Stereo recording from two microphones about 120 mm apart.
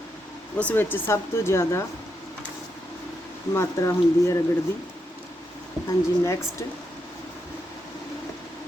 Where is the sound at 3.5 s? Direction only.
20° left (ahead or behind).